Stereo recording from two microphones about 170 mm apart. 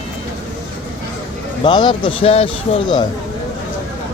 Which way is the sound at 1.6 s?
25° left (ahead or behind).